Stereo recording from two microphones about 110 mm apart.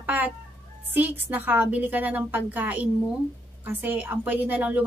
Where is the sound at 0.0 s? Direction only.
15° right (ahead or behind).